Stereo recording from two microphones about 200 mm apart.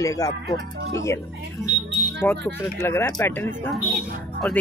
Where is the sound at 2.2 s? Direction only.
10° left (ahead or behind).